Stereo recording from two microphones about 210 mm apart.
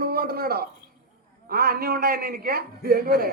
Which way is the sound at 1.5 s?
45° right (ahead or behind).